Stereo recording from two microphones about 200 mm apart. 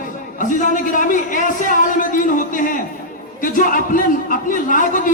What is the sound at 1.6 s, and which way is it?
Music, 40° left (ahead or behind).